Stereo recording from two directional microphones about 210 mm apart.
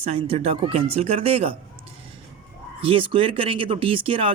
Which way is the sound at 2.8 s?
25° right (ahead or behind).